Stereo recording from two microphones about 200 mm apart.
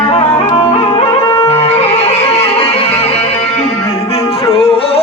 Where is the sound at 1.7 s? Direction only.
30° left (ahead or behind).